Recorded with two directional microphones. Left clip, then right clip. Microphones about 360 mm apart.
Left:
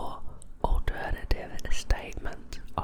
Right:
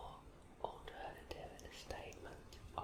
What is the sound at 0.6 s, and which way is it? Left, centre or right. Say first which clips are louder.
Whispering: left 14 dB; left.